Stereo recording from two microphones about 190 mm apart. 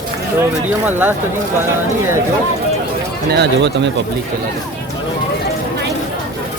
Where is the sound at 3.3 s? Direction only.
60° right (ahead or behind).